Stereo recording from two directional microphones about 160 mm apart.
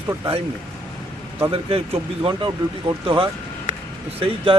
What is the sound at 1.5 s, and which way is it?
Speech, 35° right (ahead or behind).